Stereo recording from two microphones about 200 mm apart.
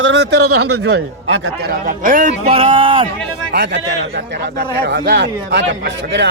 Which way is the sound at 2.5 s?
25° right (ahead or behind).